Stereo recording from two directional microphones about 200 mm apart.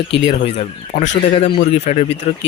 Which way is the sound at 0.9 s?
55° left (ahead or behind).